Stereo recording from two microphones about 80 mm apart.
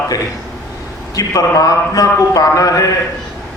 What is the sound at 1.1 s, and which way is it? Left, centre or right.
A man's voice, left.